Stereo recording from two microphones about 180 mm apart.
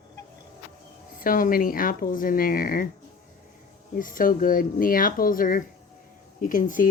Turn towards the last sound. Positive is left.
turn(degrees=50)  # may be behind; listen again after turning